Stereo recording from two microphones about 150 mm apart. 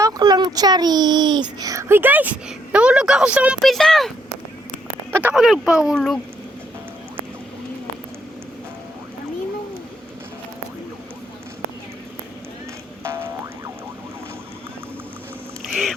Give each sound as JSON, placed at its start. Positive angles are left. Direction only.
{"t": 0.0, "sound": "a child's voice", "side_deg": -25}
{"t": 3.6, "sound": "speech", "side_deg": 0}
{"t": 5.1, "sound": "speech", "side_deg": -5}
{"t": 13.0, "sound": "boing", "side_deg": -15}
{"t": 15.7, "sound": "duck", "side_deg": 0}